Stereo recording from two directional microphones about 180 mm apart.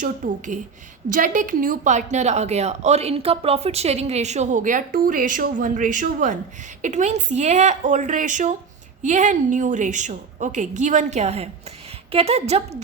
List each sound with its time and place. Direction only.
0.0 s a woman's voice: 45° right (ahead or behind)